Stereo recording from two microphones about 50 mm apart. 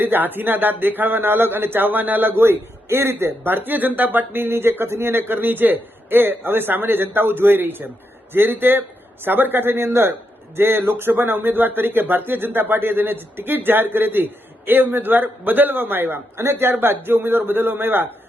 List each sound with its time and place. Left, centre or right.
0.0 s speech: right
9.7 s a man's voice: right
16.4 s a man's voice: right
16.7 s speech: right